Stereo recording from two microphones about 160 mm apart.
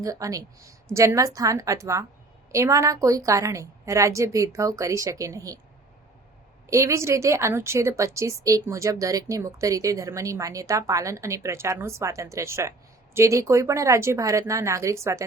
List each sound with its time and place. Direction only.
0.0 s a woman's voice: 20° right (ahead or behind)
6.7 s a woman's voice: 20° right (ahead or behind)